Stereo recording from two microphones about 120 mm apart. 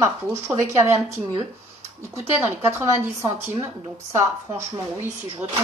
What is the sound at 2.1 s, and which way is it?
Speech, 20° right (ahead or behind).